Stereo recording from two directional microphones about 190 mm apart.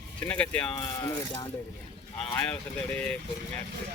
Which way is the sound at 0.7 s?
20° left (ahead or behind).